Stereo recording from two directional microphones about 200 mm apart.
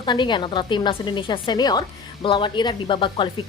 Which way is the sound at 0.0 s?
25° left (ahead or behind).